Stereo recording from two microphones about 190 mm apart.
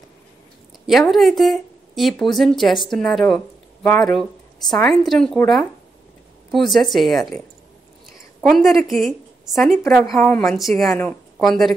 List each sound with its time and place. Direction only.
0.8 s a woman's voice: centre (ahead or behind)